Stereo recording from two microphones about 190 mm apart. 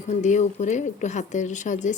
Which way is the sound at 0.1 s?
40° left (ahead or behind).